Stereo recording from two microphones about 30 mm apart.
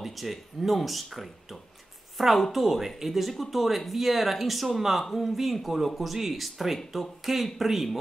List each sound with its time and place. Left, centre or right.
0.0 s a woman's voice: centre